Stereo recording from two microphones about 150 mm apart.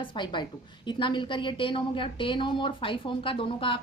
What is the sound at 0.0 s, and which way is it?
A woman's voice, 30° left (ahead or behind).